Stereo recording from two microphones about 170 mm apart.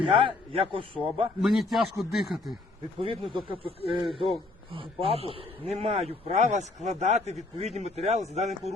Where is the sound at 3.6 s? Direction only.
35° left (ahead or behind).